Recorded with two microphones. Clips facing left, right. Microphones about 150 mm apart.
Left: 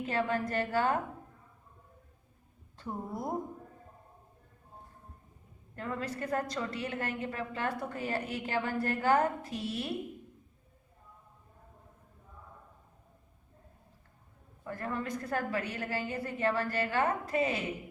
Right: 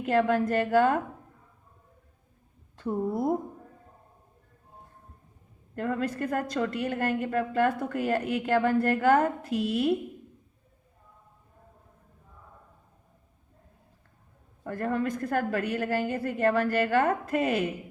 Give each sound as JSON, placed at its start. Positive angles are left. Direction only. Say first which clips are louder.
{"t": 0.0, "sound": "a woman's voice", "louder": "right 8 dB", "side_deg": -60}
{"t": 5.7, "sound": "a woman's voice", "louder": "right 7 dB", "side_deg": -55}
{"t": 14.6, "sound": "a woman's voice", "louder": "right 8 dB", "side_deg": -55}